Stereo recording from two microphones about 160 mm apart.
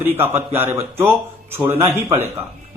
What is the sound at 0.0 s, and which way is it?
Speech, 15° right (ahead or behind).